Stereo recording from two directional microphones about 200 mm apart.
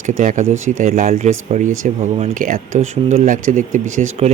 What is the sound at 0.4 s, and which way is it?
Speech, 80° right.